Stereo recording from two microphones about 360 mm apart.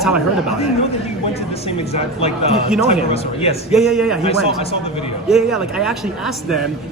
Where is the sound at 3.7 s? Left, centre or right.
Centre.